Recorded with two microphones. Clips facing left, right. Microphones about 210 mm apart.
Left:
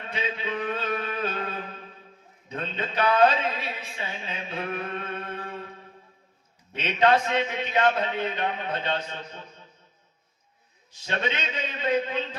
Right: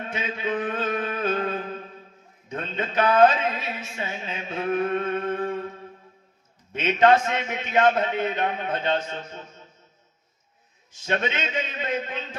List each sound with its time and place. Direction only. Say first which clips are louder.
0.1 s music: right 2 dB; 50° right (ahead or behind)
2.5 s a sound: right 2 dB; 50° right (ahead or behind)
6.7 s a man's voice: right 3 dB; 50° right (ahead or behind)
10.9 s a man's voice: right 3 dB; 50° right (ahead or behind)